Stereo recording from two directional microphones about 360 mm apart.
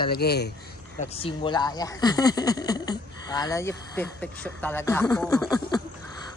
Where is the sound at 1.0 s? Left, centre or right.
Centre.